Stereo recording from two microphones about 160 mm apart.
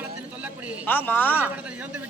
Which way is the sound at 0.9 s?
10° left (ahead or behind).